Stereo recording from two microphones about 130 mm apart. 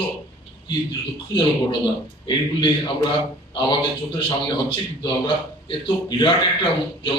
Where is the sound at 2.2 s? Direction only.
35° left (ahead or behind).